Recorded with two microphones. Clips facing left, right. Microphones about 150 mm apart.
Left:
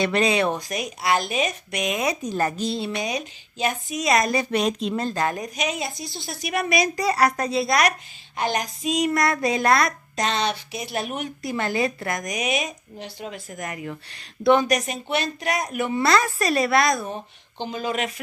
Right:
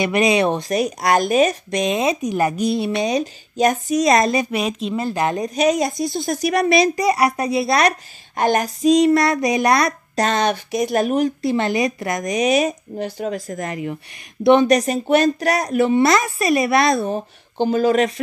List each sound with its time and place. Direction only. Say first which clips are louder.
0.0 s speech: right 4 dB; 15° right (ahead or behind)
0.7 s speech: right 6 dB; 35° right (ahead or behind)
2.2 s speech: right 5 dB; 15° right (ahead or behind)
3.0 s speech: right 8 dB; 35° right (ahead or behind)
4.5 s speech: right 1 dB; 5° right (ahead or behind)
5.4 s speech: right 10 dB; 35° right (ahead or behind)
7.0 s speech: right 3 dB; 15° right (ahead or behind)
7.6 s speech: right 4 dB; 30° right (ahead or behind)
8.4 s speech: right 7 dB; 45° right (ahead or behind); by 9.9 s 20° right (ahead or behind)
10.1 s speech: right 6 dB; 45° right (ahead or behind)
11.5 s speech: right 5 dB; 20° right (ahead or behind); by 13.6 s 45° right (ahead or behind)
13.6 s speech: right 6 dB; 25° right (ahead or behind)
16.8 s speech: right 5 dB; 30° right (ahead or behind)
17.6 s speech: right 11 dB; 45° right (ahead or behind)